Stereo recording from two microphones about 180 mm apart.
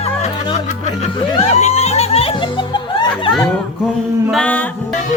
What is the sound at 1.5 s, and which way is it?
Music, 35° left (ahead or behind).